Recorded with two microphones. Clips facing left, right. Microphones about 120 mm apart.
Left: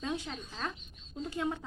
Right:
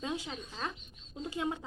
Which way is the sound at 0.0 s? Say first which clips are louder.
Left 1 dB; 15° right (ahead or behind).